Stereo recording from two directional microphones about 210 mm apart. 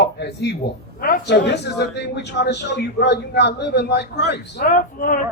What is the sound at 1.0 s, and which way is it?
A man's voice, 45° left (ahead or behind).